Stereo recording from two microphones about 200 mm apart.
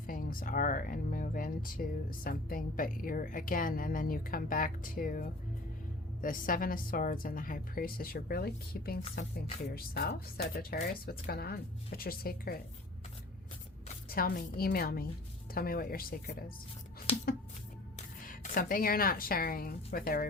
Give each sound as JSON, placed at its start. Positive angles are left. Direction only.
{"t": 0.1, "sound": "speech", "side_deg": 45}
{"t": 13.8, "sound": "a woman's voice", "side_deg": 45}
{"t": 18.3, "sound": "speech", "side_deg": 45}